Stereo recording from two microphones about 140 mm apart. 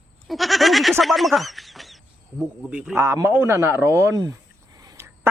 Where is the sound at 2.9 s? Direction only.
20° right (ahead or behind).